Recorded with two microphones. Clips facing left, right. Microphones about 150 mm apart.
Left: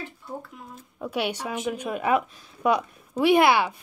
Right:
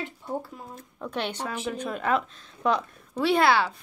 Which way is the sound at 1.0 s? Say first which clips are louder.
Left 3 dB; 10° left (ahead or behind).